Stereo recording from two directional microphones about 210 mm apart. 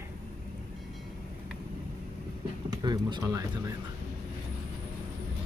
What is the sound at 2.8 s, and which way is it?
Speech, 20° right (ahead or behind).